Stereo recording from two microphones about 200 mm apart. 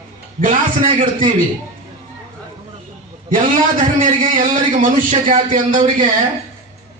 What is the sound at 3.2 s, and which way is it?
Speech, 40° right (ahead or behind).